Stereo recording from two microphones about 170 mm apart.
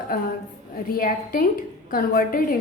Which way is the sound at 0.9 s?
55° left (ahead or behind).